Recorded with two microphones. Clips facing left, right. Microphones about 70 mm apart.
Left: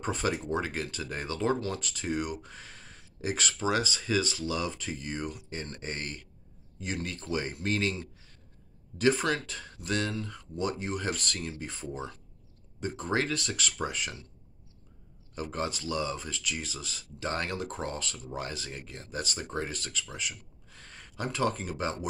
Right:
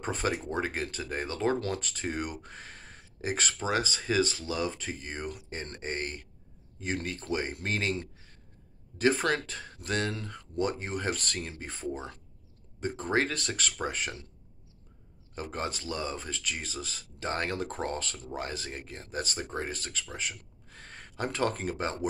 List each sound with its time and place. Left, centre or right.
0.0 s speech: right
15.3 s speech: right